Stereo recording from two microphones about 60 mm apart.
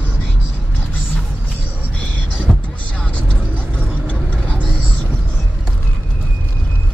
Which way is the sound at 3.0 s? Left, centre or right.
Left.